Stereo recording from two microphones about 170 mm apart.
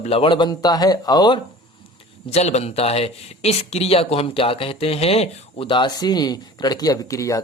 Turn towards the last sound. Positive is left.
turn(degrees=20)  # may be behind; listen again after turning